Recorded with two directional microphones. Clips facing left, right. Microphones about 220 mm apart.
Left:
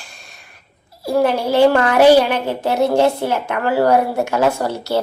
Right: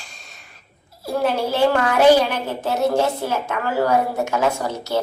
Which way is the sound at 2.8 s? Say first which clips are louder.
Left 4 dB; 65° left (ahead or behind).